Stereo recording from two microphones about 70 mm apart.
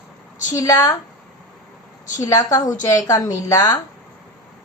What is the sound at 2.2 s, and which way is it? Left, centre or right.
A woman's voice, left.